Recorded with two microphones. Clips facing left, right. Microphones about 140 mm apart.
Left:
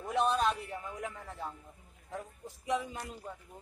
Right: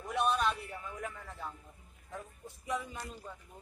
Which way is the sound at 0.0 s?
35° left (ahead or behind).